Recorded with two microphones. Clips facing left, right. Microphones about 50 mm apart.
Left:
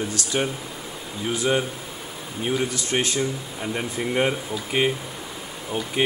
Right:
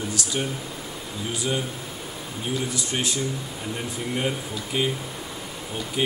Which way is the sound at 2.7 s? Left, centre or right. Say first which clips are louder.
Left 3 dB; left.